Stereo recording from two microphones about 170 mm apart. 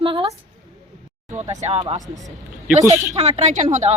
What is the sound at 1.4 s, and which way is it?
Speech, 45° right (ahead or behind).